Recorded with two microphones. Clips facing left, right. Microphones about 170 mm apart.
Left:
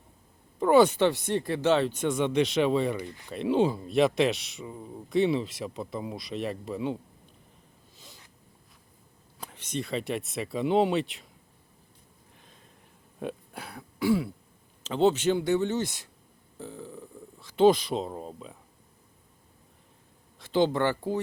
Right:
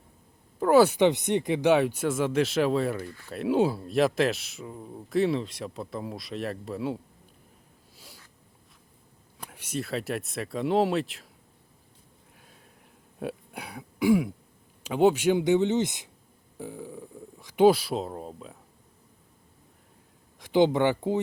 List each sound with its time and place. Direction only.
0.6 s speech: 5° right (ahead or behind)
3.1 s speech: 20° left (ahead or behind)
3.3 s speech: 5° right (ahead or behind)
7.9 s a sound: 10° right (ahead or behind)
9.4 s speech: 10° right (ahead or behind)
13.1 s speech: 5° right (ahead or behind)
20.4 s speech: 15° right (ahead or behind)